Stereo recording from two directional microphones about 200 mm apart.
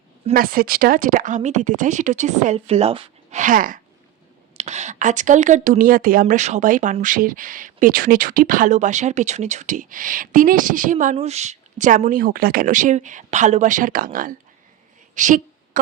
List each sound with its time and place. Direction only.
0.3 s speech: 45° right (ahead or behind); by 3.4 s 30° right (ahead or behind)
3.4 s speech: 40° right (ahead or behind)
15.1 s a sound: 40° right (ahead or behind)